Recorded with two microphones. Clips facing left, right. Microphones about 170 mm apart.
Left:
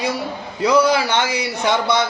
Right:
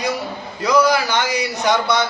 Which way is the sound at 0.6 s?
30° left (ahead or behind).